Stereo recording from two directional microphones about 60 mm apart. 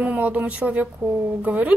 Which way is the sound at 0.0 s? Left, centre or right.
Right.